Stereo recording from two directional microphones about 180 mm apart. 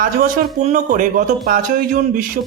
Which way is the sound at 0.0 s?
50° right (ahead or behind).